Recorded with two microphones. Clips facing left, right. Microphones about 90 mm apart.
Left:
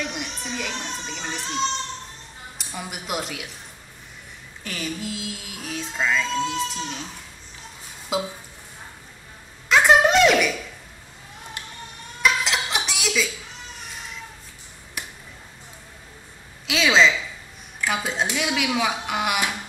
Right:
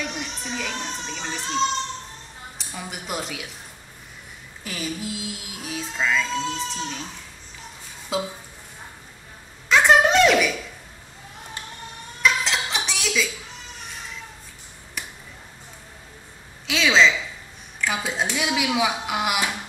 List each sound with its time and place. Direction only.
0.0 s a sound: 5° left (ahead or behind)
2.5 s speech: 5° left (ahead or behind)
4.6 s speech: 5° right (ahead or behind)
5.6 s music: 5° right (ahead or behind)
5.9 s speech: 5° left (ahead or behind)
8.1 s speech: 5° left (ahead or behind)
9.7 s a sound: centre (ahead or behind)
12.2 s music: 5° left (ahead or behind)
16.6 s a sound: centre (ahead or behind)
17.7 s speech: 5° left (ahead or behind)